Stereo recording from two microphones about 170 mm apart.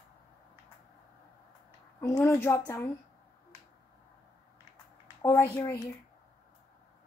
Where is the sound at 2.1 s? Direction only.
15° left (ahead or behind).